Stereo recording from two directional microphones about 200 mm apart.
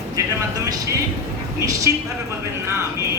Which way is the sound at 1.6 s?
15° right (ahead or behind).